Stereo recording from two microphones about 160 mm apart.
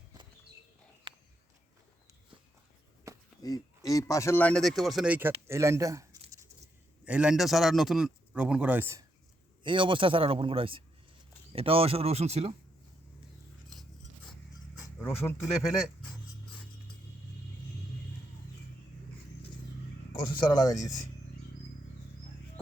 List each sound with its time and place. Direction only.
3.4 s speech: 20° left (ahead or behind); by 6.1 s 20° right (ahead or behind)
7.0 s a man's voice: 5° right (ahead or behind)
9.6 s speech: 30° right (ahead or behind)
15.0 s speech: 15° left (ahead or behind)
20.2 s speech: 25° left (ahead or behind)